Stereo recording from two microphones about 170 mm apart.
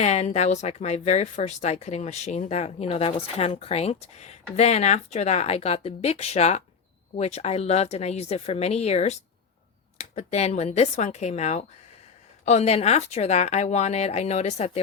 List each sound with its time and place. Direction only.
0.0 s speech: 40° left (ahead or behind)